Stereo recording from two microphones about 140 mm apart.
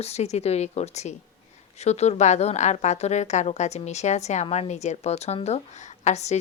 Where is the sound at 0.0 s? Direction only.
50° left (ahead or behind).